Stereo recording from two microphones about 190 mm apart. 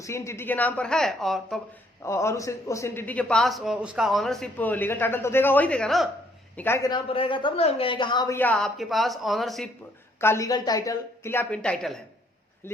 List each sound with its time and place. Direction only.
0.0 s a woman's voice: 15° left (ahead or behind)
2.0 s a man's voice: 15° left (ahead or behind)
6.6 s a woman's voice: 15° left (ahead or behind)
8.4 s a woman's voice: 5° left (ahead or behind)
10.2 s a man's voice: 15° left (ahead or behind)